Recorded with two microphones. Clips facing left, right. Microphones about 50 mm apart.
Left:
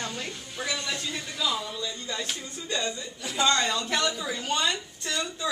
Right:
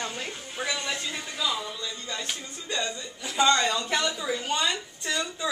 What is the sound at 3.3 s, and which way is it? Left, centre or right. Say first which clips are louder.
Speech: right 2 dB; centre.